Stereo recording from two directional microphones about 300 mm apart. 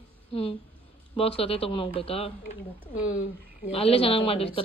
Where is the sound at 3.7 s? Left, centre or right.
Centre.